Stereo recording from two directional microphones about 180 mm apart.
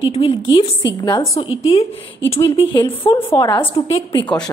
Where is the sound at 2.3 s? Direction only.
30° left (ahead or behind).